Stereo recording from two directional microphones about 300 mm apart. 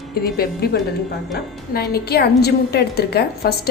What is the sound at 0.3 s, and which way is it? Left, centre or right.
A woman's voice, left.